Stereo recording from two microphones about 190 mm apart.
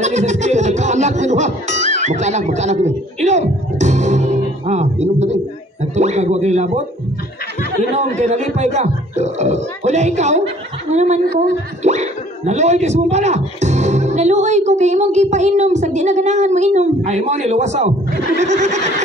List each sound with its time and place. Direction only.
0.0 s music: 35° right (ahead or behind)
7.9 s speech: 35° right (ahead or behind)